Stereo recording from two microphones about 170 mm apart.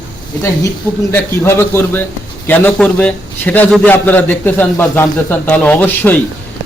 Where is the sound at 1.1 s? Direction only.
15° left (ahead or behind).